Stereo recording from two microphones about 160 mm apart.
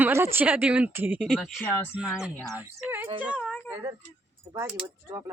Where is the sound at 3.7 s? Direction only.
20° right (ahead or behind).